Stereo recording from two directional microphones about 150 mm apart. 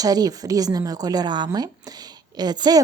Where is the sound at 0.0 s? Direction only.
25° right (ahead or behind).